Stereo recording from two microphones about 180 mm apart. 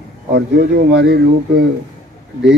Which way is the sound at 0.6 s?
60° right (ahead or behind).